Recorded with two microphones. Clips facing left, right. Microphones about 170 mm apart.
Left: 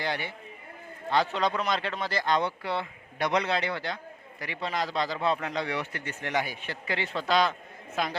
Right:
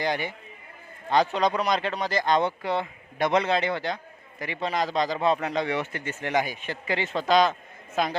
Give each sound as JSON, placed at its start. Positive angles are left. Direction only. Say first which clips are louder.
{"t": 0.0, "sound": "a man's voice", "louder": "right 4 dB", "side_deg": -15}